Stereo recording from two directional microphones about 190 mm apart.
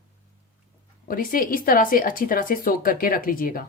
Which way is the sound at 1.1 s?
50° left (ahead or behind).